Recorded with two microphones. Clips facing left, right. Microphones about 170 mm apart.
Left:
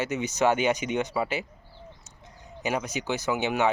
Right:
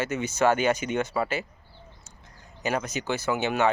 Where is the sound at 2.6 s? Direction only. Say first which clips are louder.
Right 1 dB; 15° left (ahead or behind).